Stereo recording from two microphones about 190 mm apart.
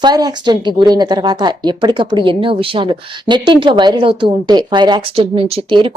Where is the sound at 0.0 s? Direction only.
20° right (ahead or behind).